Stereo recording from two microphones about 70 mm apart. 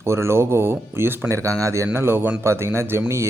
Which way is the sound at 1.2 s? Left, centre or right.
Right.